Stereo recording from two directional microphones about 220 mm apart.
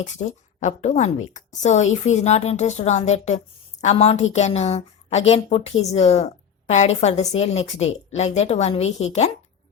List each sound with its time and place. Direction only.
0.0 s a woman's voice: 30° left (ahead or behind)